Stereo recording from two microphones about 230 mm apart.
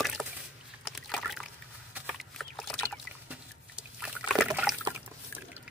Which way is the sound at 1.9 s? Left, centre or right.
Centre.